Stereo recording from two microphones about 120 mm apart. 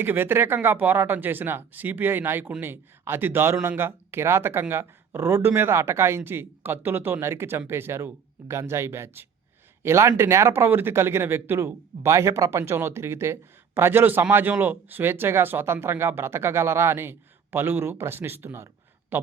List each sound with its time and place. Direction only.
0.0 s a man's voice: 15° right (ahead or behind)